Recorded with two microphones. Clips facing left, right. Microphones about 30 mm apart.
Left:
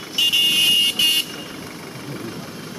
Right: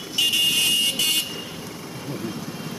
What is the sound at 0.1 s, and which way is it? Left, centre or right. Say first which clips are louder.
Vehicle: left 3 dB; centre.